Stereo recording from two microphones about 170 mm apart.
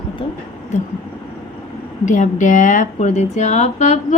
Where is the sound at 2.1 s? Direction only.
50° left (ahead or behind).